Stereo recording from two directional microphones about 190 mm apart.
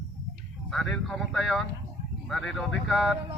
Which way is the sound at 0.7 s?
5° left (ahead or behind).